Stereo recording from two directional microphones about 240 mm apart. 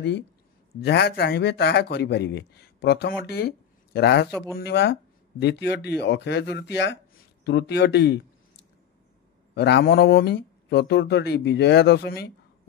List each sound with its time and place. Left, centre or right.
0.7 s a man's voice: left
9.6 s a man's voice: left